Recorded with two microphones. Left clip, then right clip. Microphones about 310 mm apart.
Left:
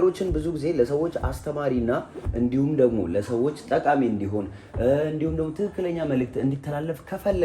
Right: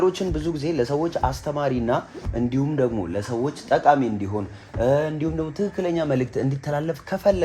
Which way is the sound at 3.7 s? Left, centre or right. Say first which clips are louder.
Right 4 dB; centre.